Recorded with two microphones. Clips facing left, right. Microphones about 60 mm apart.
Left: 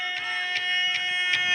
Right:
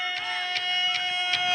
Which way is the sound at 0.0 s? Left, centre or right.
Left.